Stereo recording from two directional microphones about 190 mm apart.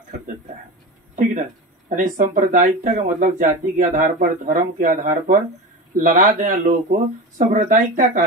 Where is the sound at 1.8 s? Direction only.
40° right (ahead or behind).